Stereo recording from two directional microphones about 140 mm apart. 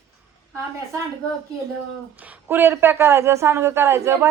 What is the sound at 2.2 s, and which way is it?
A woman's voice, 15° right (ahead or behind).